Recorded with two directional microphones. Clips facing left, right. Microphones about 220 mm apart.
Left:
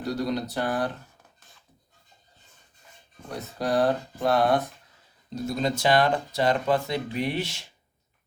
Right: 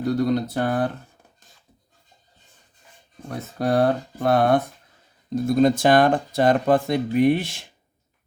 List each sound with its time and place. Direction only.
0.1 s speech: 50° right (ahead or behind)
3.2 s speech: 55° right (ahead or behind)